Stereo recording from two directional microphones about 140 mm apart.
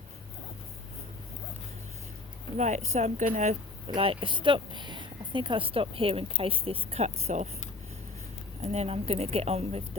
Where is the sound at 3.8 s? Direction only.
40° right (ahead or behind).